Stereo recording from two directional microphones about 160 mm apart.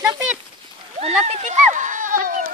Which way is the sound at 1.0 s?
45° right (ahead or behind).